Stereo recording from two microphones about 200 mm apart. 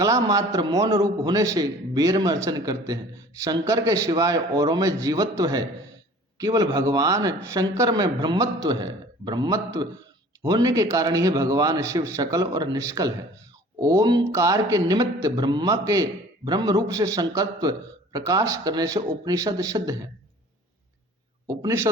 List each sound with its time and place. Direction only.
0.0 s a man's voice: 15° right (ahead or behind)
21.4 s a man's voice: 15° right (ahead or behind)